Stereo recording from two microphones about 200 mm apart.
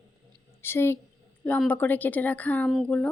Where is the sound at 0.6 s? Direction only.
10° left (ahead or behind).